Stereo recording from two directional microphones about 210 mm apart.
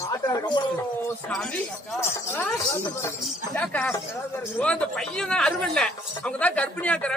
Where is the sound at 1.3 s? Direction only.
5° left (ahead or behind).